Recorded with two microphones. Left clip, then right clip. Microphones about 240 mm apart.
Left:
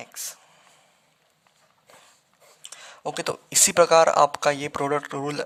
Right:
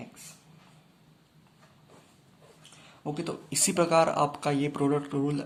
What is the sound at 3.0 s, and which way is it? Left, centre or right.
Speech, left.